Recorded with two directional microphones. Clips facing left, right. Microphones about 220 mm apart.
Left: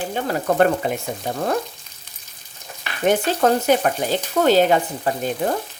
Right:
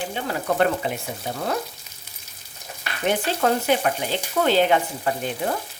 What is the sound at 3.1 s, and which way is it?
Stir, 40° left (ahead or behind).